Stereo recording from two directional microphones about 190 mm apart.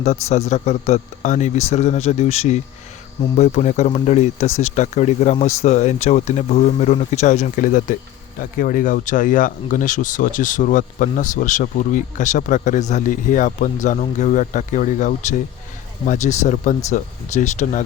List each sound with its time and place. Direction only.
0.0 s speech: 35° left (ahead or behind)